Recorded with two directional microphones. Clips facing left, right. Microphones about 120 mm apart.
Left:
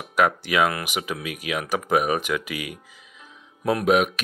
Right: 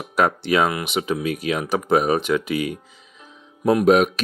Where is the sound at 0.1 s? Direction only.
30° right (ahead or behind).